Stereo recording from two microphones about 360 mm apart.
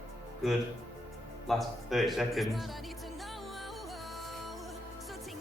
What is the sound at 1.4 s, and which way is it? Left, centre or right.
Music, centre.